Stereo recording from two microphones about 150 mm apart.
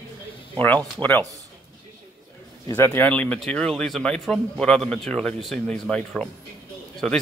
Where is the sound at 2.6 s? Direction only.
15° left (ahead or behind).